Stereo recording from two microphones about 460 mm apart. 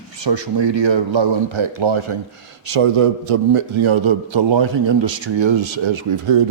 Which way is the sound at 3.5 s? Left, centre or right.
Right.